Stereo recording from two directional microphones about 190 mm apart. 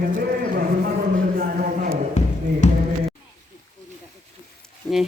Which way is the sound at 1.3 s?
45° right (ahead or behind).